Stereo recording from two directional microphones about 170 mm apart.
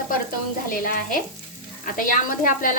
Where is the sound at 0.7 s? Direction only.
55° left (ahead or behind).